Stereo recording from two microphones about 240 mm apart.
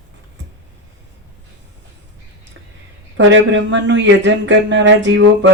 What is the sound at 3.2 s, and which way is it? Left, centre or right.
Speech, right.